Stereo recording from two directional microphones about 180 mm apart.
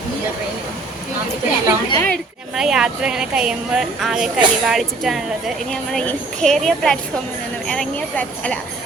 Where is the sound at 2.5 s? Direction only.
5° right (ahead or behind).